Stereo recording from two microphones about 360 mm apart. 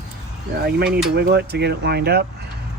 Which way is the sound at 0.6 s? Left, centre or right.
Right.